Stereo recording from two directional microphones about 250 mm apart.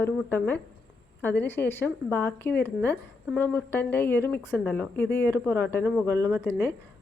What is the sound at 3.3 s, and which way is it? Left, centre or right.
Speech, centre.